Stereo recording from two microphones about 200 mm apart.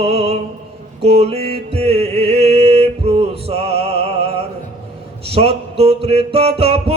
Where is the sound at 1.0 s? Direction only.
30° right (ahead or behind).